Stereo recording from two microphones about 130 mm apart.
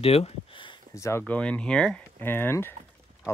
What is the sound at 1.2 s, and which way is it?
Speech, 10° left (ahead or behind).